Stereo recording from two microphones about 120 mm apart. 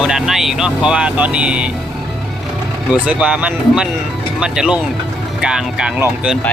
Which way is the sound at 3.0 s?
10° right (ahead or behind).